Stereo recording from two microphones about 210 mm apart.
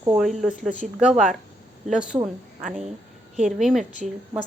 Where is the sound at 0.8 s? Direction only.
35° right (ahead or behind).